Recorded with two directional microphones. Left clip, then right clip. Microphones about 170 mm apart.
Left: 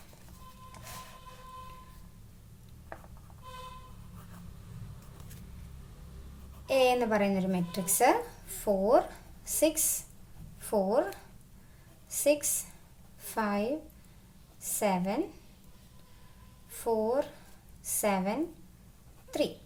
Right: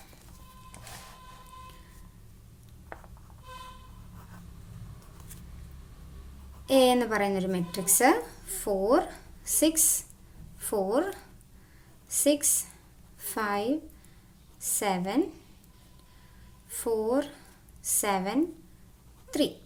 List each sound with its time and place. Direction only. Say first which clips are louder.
6.7 s speech: right 3 dB; 40° right (ahead or behind)
12.0 s a woman's voice: right 1 dB; 35° right (ahead or behind)
16.7 s a woman's voice: right 1 dB; 35° right (ahead or behind)